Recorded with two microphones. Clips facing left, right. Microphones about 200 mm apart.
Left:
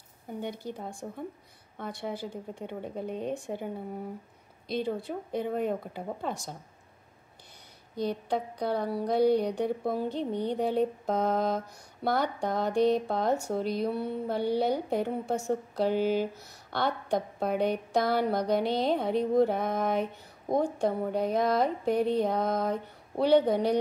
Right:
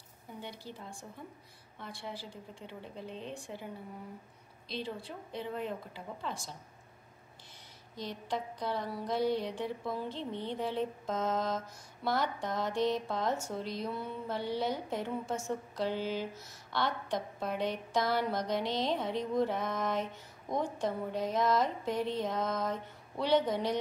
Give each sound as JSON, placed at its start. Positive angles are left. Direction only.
{"t": 0.3, "sound": "a woman's voice", "side_deg": 50}
{"t": 8.3, "sound": "a woman's voice", "side_deg": 55}
{"t": 17.4, "sound": "speech", "side_deg": 60}